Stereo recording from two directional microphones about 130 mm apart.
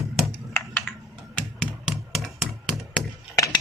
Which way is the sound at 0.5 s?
20° left (ahead or behind).